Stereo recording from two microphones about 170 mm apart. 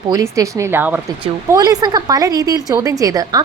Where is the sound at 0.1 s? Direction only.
20° right (ahead or behind).